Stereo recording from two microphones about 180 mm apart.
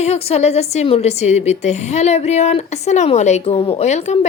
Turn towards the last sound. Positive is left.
turn(degrees=40)  # may be behind; listen again after turning